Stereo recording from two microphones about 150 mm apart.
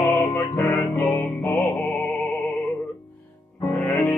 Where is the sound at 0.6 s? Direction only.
10° left (ahead or behind).